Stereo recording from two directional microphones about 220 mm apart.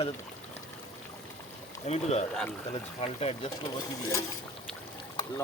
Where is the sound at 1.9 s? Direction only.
30° left (ahead or behind).